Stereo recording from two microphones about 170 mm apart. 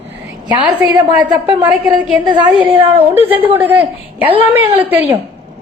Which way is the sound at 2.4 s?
10° right (ahead or behind).